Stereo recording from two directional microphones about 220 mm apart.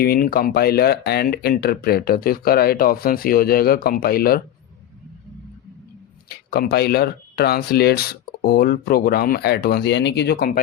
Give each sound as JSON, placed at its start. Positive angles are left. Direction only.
{"t": 0.0, "sound": "speech", "side_deg": 45}
{"t": 6.2, "sound": "speech", "side_deg": 45}